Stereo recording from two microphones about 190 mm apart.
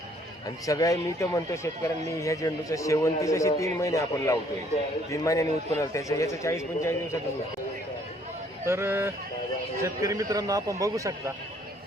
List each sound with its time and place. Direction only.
0.4 s speech: 20° left (ahead or behind)
8.6 s a man's voice: 15° right (ahead or behind)